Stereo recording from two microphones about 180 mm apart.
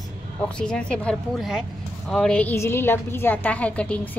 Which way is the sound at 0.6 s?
5° left (ahead or behind).